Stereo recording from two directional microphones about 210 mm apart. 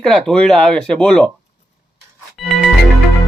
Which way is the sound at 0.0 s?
Centre (ahead or behind).